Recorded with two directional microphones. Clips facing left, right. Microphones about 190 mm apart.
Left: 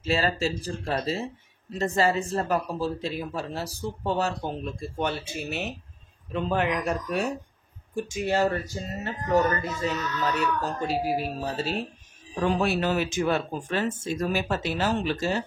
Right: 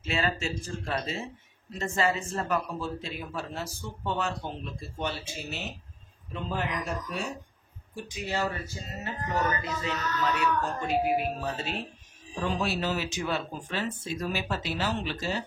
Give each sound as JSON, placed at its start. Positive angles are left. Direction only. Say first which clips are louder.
{"t": 0.0, "sound": "speech", "louder": "left 5 dB", "side_deg": 35}
{"t": 7.9, "sound": "speech", "louder": "left 7 dB", "side_deg": 50}
{"t": 12.5, "sound": "speech", "louder": "left 4 dB", "side_deg": 55}